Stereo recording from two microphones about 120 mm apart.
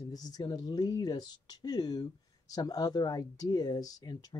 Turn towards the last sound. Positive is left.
turn(degrees=35)  # may be behind; listen again after turning